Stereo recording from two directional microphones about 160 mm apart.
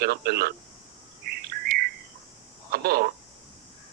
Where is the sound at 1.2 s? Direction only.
75° right (ahead or behind).